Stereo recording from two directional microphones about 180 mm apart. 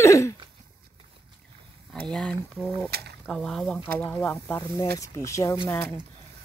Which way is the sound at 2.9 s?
60° right (ahead or behind).